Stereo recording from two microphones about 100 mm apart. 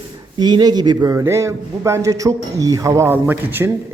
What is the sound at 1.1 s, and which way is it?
A man's voice, 30° right (ahead or behind).